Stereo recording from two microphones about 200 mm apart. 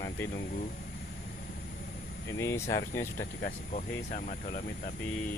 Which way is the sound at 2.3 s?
15° left (ahead or behind).